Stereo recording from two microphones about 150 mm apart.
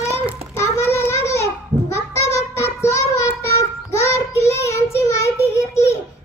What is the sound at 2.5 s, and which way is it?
Child singing, 20° left (ahead or behind).